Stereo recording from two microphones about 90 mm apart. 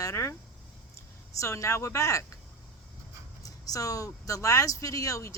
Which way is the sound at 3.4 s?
40° left (ahead or behind).